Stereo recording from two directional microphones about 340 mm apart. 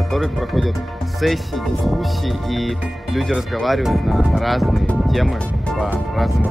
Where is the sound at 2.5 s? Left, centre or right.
Centre.